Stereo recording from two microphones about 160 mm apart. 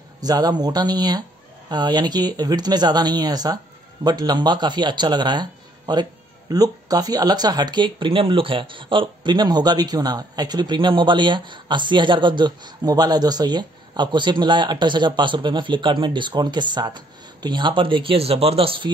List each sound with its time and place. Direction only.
0.2 s speech: 25° right (ahead or behind)